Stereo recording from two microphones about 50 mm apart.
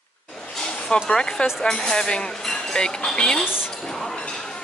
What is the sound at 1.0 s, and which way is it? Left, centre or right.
Speech, centre.